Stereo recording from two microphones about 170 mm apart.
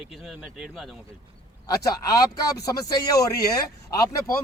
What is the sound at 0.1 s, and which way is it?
Speech, 5° right (ahead or behind).